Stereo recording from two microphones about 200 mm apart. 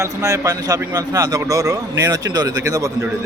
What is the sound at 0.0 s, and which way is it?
A man's voice, 15° right (ahead or behind).